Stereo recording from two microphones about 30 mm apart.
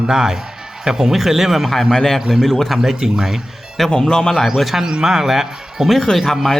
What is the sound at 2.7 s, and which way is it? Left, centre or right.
Speech, centre.